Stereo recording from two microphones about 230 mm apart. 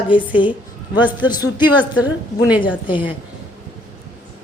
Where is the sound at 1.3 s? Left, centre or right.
Centre.